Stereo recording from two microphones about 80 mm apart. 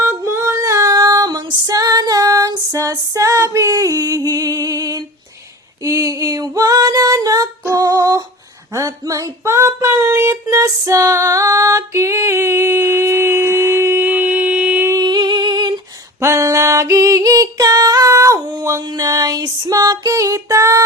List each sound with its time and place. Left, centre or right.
0.0 s female singing: right
7.7 s a sound: right
10.5 s music: right
14.0 s mantra: centre
14.9 s a sound: right
16.2 s music: right